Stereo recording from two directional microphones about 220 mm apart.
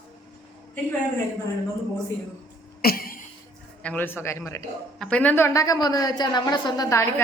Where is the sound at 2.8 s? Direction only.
40° left (ahead or behind).